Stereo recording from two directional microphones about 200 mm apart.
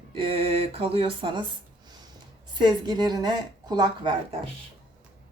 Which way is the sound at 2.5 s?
20° right (ahead or behind).